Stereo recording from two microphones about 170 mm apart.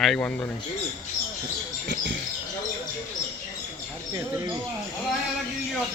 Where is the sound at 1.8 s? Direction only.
90° right.